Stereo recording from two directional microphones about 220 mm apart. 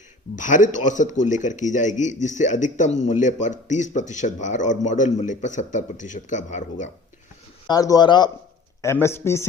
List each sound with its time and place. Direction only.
0.3 s a man's voice: 35° left (ahead or behind)
7.7 s a man's voice: 15° left (ahead or behind)